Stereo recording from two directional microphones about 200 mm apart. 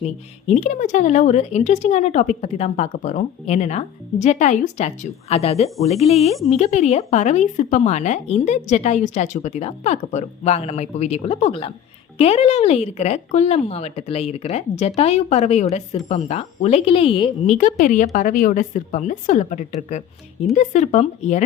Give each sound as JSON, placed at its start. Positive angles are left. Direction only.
{"t": 0.0, "sound": "speech", "side_deg": 35}